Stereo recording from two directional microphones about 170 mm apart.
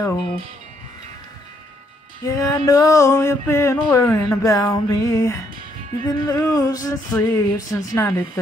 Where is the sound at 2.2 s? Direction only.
20° left (ahead or behind).